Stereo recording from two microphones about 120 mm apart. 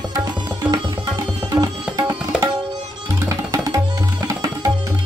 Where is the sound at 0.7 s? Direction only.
35° right (ahead or behind).